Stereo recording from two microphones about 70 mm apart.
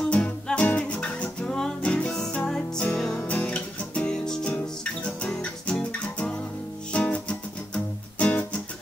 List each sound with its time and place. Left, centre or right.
0.0 s music: centre
3.3 s music: centre